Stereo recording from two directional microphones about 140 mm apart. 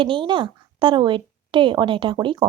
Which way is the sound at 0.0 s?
35° right (ahead or behind).